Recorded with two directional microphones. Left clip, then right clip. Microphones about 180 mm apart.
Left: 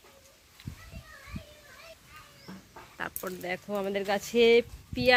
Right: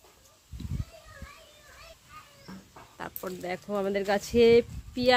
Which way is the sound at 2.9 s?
Centre (ahead or behind).